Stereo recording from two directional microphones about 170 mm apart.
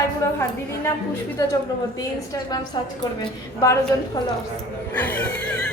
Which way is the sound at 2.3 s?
25° left (ahead or behind).